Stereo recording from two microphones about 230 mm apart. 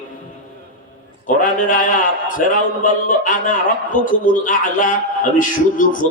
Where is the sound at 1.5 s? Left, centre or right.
Left.